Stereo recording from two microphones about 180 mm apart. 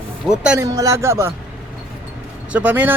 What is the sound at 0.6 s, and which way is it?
Speech, 15° right (ahead or behind).